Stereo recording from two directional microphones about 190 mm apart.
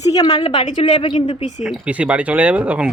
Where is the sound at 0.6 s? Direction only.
40° left (ahead or behind).